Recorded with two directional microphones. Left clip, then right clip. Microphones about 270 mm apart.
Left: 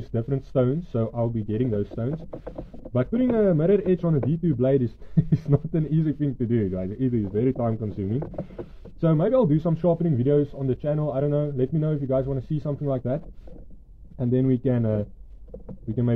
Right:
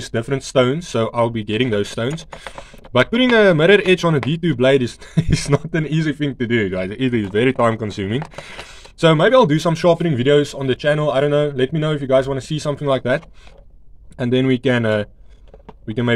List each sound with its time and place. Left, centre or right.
0.0 s speech: centre
14.3 s speech: centre